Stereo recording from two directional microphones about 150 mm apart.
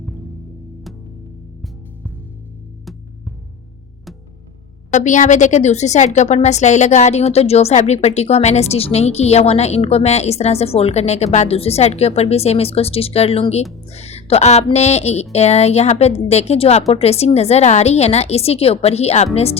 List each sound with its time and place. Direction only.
4.9 s a woman's voice: 55° left (ahead or behind)